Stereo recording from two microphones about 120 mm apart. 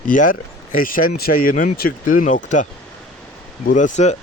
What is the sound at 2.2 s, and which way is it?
Speech, 90° left.